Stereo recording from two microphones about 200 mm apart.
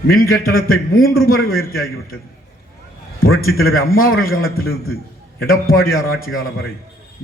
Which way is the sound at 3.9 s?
90° left.